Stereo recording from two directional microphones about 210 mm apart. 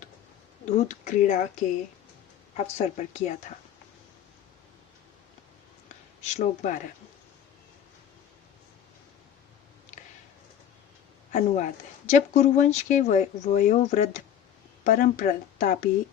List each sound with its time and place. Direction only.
0.6 s speech: 35° left (ahead or behind)
6.2 s speech: 35° left (ahead or behind)
11.3 s speech: 35° left (ahead or behind)